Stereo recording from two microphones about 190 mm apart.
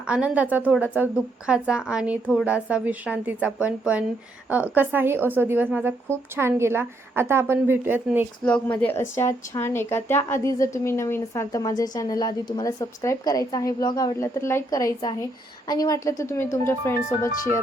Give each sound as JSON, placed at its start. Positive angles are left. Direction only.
{"t": 0.1, "sound": "a woman's voice", "side_deg": -5}
{"t": 8.4, "sound": "speech", "side_deg": 5}